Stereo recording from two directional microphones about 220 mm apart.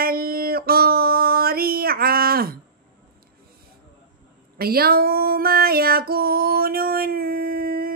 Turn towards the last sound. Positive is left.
turn(degrees=-40)  # may be behind; listen again after turning